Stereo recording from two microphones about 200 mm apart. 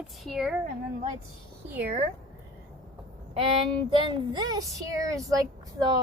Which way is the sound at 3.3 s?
25° right (ahead or behind).